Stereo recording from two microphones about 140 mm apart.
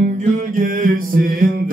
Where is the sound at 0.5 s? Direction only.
70° right (ahead or behind); by 1.4 s 90° right.